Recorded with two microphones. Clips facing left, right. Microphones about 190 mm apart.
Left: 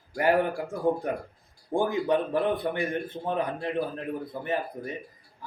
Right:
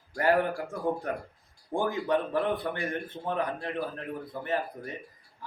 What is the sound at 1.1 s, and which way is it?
A man's voice, 15° left (ahead or behind).